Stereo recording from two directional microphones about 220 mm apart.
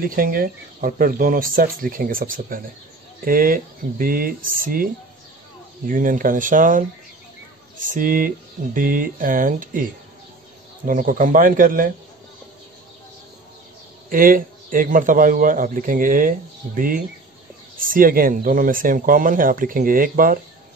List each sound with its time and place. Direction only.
0.0 s a man's voice: 40° right (ahead or behind)
5.9 s a man's voice: 40° right (ahead or behind)
7.9 s a man's voice: 40° right (ahead or behind)
10.9 s a man's voice: 35° right (ahead or behind)
14.1 s a man's voice: 40° right (ahead or behind)